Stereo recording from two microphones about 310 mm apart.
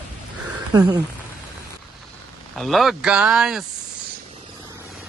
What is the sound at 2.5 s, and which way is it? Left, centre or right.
Speech, centre.